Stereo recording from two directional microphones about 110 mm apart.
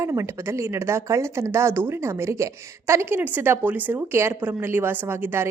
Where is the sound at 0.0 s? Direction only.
25° right (ahead or behind).